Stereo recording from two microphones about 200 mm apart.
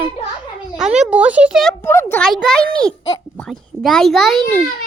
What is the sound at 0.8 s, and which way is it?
Speech, 5° right (ahead or behind).